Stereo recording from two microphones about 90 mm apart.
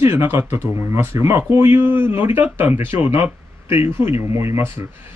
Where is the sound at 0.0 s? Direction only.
30° right (ahead or behind).